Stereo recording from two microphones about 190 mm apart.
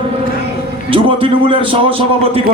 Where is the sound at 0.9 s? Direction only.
25° right (ahead or behind).